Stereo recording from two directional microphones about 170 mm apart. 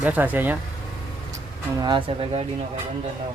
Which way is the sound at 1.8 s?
30° right (ahead or behind).